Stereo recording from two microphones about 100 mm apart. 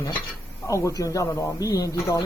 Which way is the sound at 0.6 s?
30° left (ahead or behind).